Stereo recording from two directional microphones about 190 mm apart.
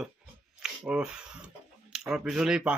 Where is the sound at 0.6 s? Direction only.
5° right (ahead or behind).